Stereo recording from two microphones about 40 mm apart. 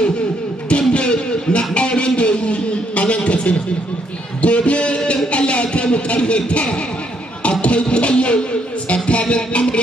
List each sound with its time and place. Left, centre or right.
0.7 s music: left
4.4 s a sound: left
7.6 s music: left